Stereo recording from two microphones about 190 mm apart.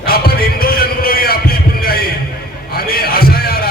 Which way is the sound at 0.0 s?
55° left (ahead or behind).